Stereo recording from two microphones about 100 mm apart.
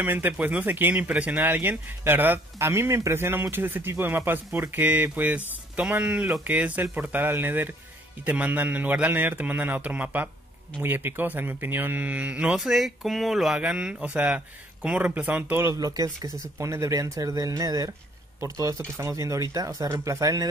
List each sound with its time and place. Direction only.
0.0 s a man's voice: 20° right (ahead or behind)
12.5 s a man's voice: centre (ahead or behind)
15.6 s speech: 35° right (ahead or behind)